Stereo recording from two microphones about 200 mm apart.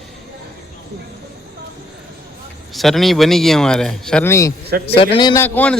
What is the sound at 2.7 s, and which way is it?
Speech, centre (ahead or behind).